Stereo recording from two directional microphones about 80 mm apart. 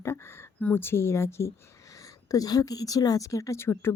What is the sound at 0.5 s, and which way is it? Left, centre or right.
Speech, centre.